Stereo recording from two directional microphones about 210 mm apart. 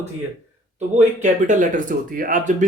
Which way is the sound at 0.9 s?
35° right (ahead or behind).